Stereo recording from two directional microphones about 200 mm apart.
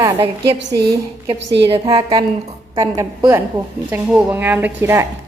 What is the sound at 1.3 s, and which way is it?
Speech, 65° right (ahead or behind).